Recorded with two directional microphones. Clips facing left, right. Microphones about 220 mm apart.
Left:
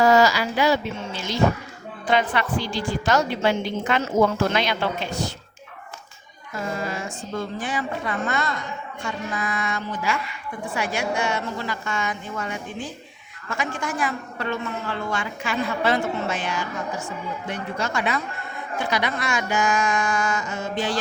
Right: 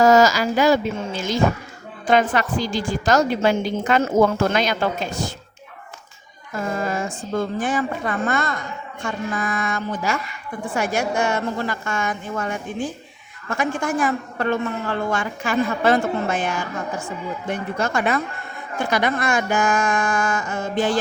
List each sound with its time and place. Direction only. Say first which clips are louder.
0.0 s a woman's voice: right 3 dB; 45° right (ahead or behind)
6.7 s a woman's voice: right 5 dB; 50° right (ahead or behind)